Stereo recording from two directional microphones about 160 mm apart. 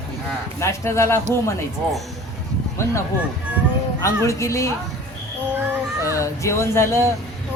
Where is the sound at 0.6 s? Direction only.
15° left (ahead or behind).